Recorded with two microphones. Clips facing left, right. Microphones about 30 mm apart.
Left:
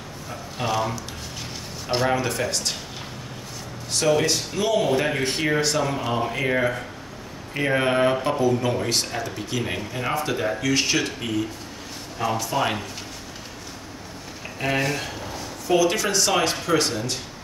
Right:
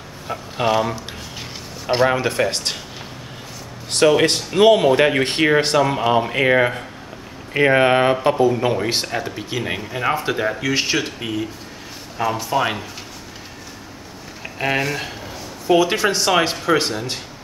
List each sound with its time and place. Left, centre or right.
0.3 s speech: right
3.9 s speech: right; by 12.8 s centre
14.6 s speech: centre
15.6 s speech: right